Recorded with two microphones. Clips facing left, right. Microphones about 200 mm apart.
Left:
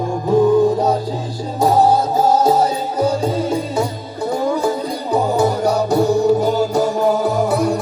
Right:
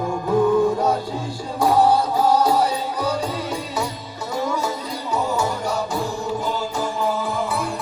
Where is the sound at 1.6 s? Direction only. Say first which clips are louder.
Left 3 dB; 40° left (ahead or behind).